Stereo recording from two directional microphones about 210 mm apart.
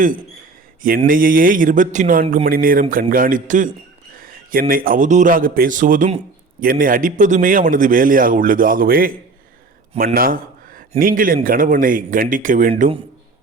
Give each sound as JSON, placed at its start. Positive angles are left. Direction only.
{"t": 0.8, "sound": "a man's voice", "side_deg": -40}